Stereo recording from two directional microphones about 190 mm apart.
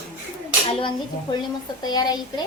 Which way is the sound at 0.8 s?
25° left (ahead or behind).